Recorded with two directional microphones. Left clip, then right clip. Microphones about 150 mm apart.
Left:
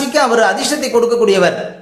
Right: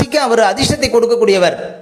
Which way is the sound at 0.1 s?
50° right (ahead or behind).